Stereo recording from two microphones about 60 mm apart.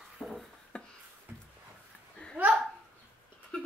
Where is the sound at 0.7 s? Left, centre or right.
Centre.